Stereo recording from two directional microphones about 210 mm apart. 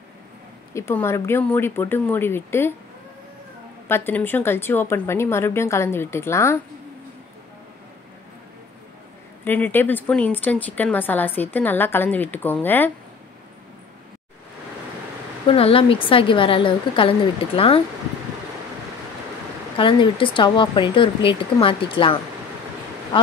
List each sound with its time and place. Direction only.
0.7 s a woman's voice: 10° left (ahead or behind)
3.9 s a woman's voice: 10° left (ahead or behind)
9.4 s a woman's voice: 10° left (ahead or behind)
15.4 s a woman's voice: 25° left (ahead or behind)
19.8 s a woman's voice: 25° left (ahead or behind)